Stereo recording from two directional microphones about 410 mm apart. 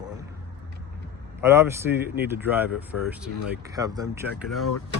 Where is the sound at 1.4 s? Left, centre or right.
Centre.